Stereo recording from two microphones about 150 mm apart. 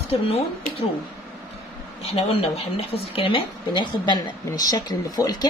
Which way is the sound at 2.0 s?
40° left (ahead or behind).